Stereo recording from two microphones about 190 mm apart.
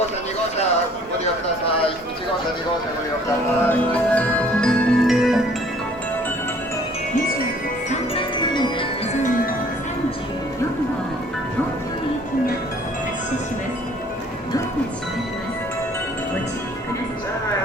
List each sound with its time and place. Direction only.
3.6 s music: 10° left (ahead or behind)
7.9 s music: 25° left (ahead or behind)
9.2 s music: 45° left (ahead or behind)